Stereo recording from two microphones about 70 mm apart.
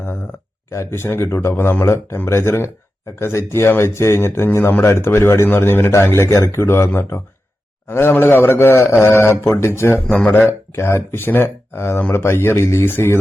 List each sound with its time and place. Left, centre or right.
0.7 s speech: left
10.1 s speech: centre; by 13.1 s left